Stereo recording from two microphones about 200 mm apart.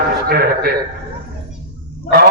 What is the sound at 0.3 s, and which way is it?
Speech, 50° right (ahead or behind).